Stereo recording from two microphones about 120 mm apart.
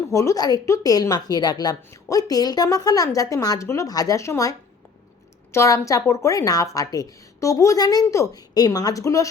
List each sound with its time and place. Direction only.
0.1 s a woman's voice: 25° left (ahead or behind)